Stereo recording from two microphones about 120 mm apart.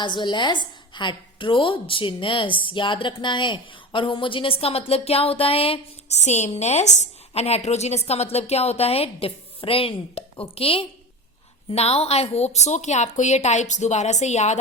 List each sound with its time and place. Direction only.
0.0 s a woman's voice: 40° left (ahead or behind); by 14.6 s 75° left (ahead or behind)